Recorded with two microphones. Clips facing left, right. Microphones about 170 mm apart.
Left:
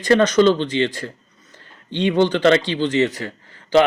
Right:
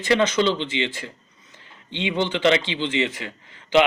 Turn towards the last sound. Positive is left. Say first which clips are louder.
# left 3 dB
turn(degrees=40)  # may be behind; listen again after turning